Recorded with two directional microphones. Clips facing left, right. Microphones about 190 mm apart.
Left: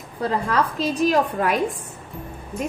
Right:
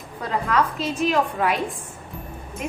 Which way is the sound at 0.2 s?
35° left (ahead or behind).